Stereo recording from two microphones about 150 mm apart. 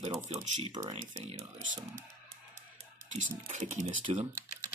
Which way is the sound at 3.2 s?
50° right (ahead or behind).